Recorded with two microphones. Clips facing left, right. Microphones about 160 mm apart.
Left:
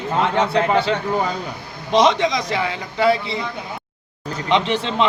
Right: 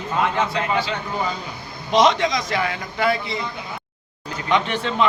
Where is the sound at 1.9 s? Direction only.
25° left (ahead or behind).